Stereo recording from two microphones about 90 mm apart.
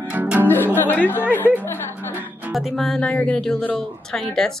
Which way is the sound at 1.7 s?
25° left (ahead or behind).